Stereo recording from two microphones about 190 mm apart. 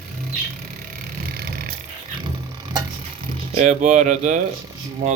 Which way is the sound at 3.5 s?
40° right (ahead or behind).